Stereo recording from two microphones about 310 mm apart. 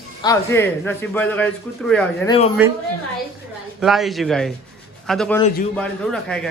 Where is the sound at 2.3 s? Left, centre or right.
Centre.